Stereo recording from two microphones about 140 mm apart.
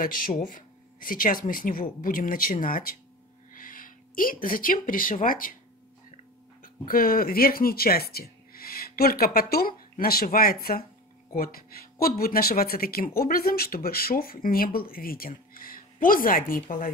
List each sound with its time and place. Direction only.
0.0 s speech: 75° left (ahead or behind)
6.9 s speech: 90° left